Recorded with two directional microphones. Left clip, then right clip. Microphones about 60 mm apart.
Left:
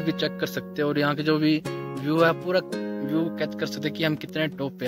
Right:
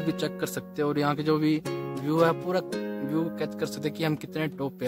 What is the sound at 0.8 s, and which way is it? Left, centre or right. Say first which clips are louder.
Speech: left 2 dB; centre.